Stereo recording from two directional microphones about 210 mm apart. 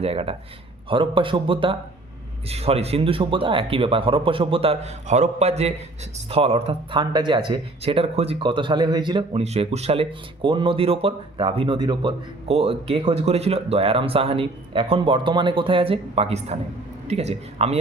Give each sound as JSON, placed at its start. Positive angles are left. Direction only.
{"t": 0.0, "sound": "a man's voice", "side_deg": -30}